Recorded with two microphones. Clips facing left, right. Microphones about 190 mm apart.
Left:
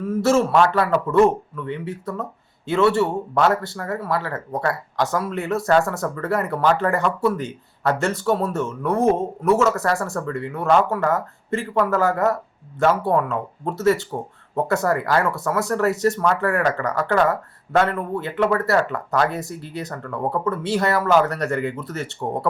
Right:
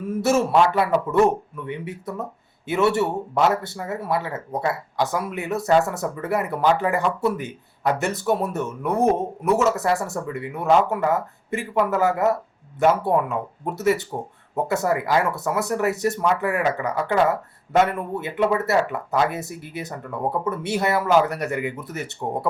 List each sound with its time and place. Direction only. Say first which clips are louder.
0.2 s speech: left 1 dB; 15° right (ahead or behind)